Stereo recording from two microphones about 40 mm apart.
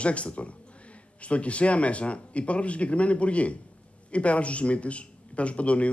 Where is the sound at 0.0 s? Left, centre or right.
Left.